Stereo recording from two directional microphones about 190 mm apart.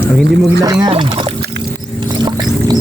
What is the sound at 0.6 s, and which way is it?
Speech, 20° right (ahead or behind).